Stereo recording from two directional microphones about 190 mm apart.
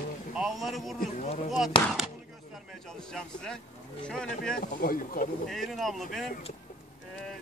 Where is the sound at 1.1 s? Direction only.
35° left (ahead or behind).